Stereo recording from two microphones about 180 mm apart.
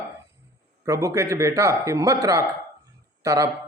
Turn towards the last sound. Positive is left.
turn(degrees=-15)  # may be behind; listen again after turning